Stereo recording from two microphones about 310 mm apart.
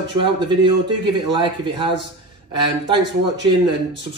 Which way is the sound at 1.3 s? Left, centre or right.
Centre.